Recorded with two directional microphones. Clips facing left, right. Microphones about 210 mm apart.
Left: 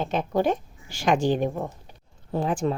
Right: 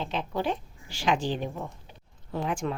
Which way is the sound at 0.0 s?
45° left (ahead or behind).